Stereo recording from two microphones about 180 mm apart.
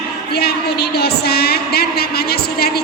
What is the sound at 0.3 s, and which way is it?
Speech, 65° left (ahead or behind).